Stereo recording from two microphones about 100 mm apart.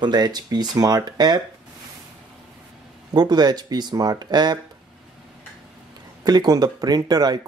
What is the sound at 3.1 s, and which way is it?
Speech, 45° right (ahead or behind).